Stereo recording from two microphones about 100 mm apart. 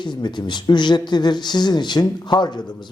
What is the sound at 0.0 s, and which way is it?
Speech, 50° left (ahead or behind).